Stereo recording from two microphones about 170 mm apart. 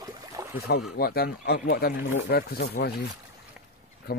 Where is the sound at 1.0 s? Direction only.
65° left (ahead or behind).